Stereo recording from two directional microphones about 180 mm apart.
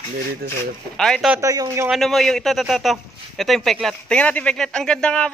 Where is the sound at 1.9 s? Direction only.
Centre (ahead or behind).